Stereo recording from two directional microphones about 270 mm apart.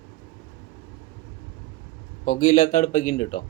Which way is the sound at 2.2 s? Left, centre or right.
Left.